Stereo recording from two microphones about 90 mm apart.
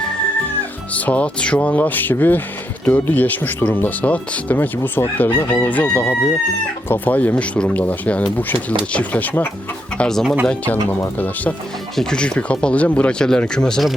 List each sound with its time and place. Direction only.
0.9 s speech: 15° left (ahead or behind)
10.0 s speech: 5° left (ahead or behind)
11.9 s speech: 10° left (ahead or behind)